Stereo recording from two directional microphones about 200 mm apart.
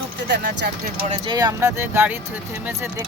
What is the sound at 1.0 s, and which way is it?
Speech, 25° right (ahead or behind).